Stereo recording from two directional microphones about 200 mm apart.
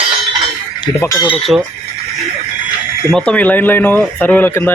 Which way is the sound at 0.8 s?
15° left (ahead or behind).